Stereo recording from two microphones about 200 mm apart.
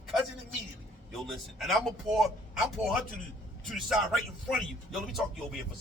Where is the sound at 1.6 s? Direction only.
Centre (ahead or behind).